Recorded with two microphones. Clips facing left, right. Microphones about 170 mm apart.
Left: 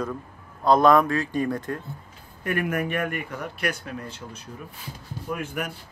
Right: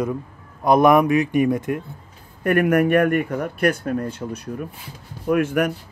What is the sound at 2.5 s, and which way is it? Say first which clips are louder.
Speech: right 9 dB; 60° right (ahead or behind).